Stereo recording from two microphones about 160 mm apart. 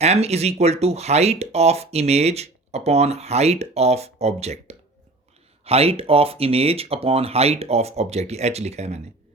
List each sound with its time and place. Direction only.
0.0 s speech: 40° right (ahead or behind)